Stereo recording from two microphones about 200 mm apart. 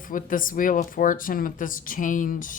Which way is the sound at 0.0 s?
40° left (ahead or behind).